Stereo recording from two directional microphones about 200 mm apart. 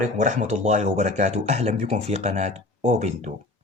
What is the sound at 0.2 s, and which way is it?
Speech, 35° right (ahead or behind).